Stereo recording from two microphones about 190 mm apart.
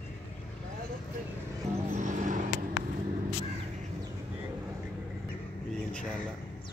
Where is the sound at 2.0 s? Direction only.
40° right (ahead or behind).